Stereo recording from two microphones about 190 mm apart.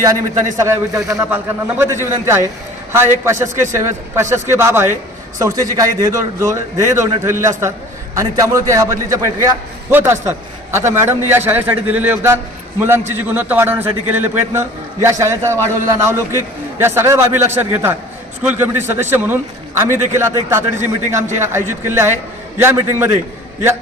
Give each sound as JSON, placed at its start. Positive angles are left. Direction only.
{"t": 0.5, "sound": "a man's voice", "side_deg": -15}